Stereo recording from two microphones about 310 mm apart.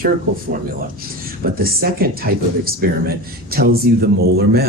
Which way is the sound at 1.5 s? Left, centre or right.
Right.